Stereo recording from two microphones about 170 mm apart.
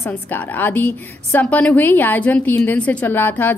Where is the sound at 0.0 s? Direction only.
10° left (ahead or behind).